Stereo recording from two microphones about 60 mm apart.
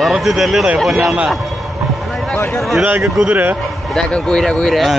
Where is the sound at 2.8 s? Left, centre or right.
Right.